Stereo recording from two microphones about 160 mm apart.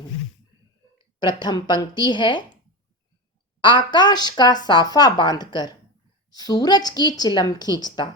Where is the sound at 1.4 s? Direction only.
25° left (ahead or behind).